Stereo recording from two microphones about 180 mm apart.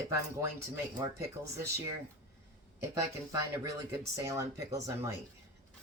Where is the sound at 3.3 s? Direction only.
20° right (ahead or behind).